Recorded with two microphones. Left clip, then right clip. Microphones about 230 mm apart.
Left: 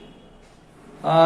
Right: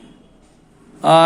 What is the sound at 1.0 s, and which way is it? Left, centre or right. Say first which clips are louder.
Speech: right 6 dB; right.